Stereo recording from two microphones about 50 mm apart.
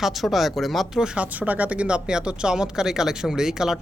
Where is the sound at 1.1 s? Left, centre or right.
Right.